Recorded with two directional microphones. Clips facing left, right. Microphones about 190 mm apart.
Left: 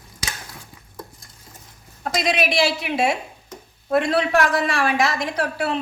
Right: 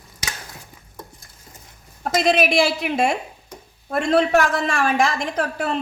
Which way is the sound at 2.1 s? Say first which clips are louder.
Right 3 dB; 50° right (ahead or behind).